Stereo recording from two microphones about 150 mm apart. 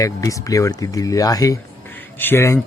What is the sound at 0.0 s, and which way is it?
Speech, 20° left (ahead or behind).